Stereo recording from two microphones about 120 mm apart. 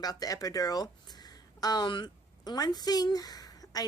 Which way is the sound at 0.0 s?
30° left (ahead or behind).